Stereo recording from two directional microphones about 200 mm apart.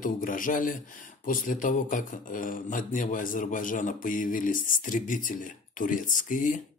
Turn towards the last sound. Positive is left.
turn(degrees=40)  # may be behind; listen again after turning